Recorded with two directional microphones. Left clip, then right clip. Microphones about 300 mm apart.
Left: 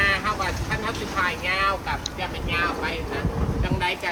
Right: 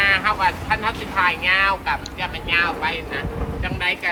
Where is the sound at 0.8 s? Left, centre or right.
Centre.